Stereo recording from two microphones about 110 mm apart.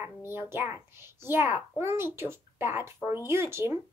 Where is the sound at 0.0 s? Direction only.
20° right (ahead or behind).